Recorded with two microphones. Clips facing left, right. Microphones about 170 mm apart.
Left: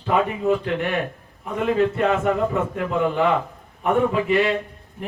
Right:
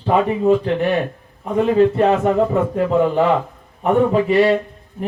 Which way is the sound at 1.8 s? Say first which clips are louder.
Right 6 dB; 35° right (ahead or behind).